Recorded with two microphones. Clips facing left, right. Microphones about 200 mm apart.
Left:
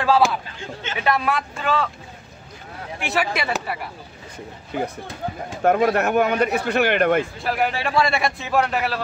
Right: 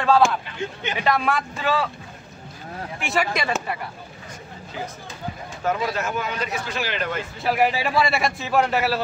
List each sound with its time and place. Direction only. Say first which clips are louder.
0.0 s a man's voice: even; 5° left (ahead or behind)
3.0 s a man's voice: left 1 dB; centre (ahead or behind)
4.7 s speech: left 7 dB; 60° left (ahead or behind)
7.4 s a man's voice: right 2 dB; 5° right (ahead or behind)